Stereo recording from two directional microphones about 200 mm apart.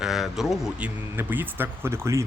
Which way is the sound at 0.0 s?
Centre (ahead or behind).